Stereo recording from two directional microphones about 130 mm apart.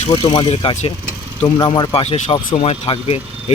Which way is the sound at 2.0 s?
55° left (ahead or behind).